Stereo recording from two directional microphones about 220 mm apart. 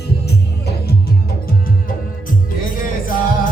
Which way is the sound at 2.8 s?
40° left (ahead or behind).